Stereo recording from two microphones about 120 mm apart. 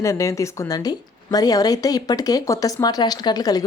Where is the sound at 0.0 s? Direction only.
25° left (ahead or behind).